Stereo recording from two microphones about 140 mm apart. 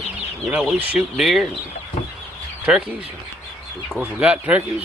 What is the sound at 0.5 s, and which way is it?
Speech, 5° right (ahead or behind).